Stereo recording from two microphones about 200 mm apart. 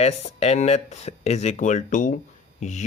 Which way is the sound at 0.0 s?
30° left (ahead or behind).